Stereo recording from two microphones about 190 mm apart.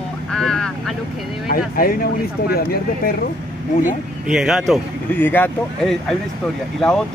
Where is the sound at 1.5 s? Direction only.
50° left (ahead or behind).